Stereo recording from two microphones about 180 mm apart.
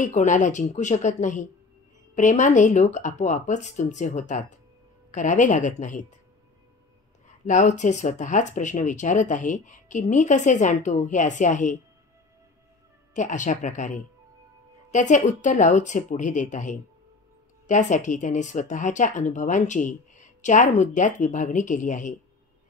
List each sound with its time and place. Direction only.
0.0 s speech: 45° left (ahead or behind)
7.4 s speech: 45° left (ahead or behind)
13.1 s speech: 45° left (ahead or behind)